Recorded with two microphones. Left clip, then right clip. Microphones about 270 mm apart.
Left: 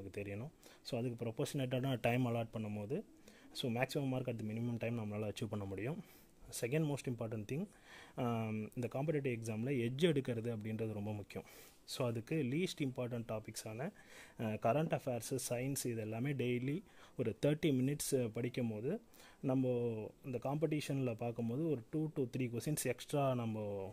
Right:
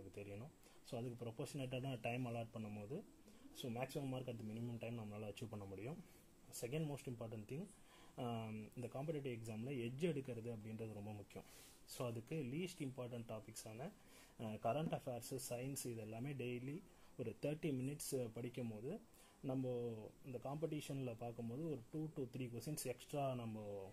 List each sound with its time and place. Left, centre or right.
0.1 s speech: left